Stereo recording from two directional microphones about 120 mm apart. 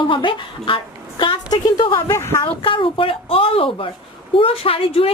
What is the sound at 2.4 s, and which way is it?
A woman's voice, 45° left (ahead or behind).